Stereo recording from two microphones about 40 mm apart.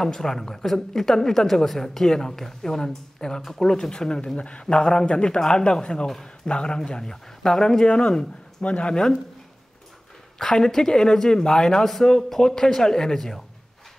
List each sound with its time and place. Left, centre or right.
0.0 s a woman's voice: centre
4.4 s a man's voice: left
4.7 s a man's voice: centre
7.8 s speech: left
8.6 s a man's voice: left
10.4 s a woman's voice: centre